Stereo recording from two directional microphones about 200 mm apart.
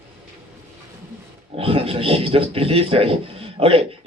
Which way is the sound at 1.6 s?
30° right (ahead or behind).